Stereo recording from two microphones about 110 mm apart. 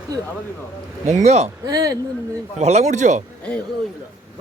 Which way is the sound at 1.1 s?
85° right.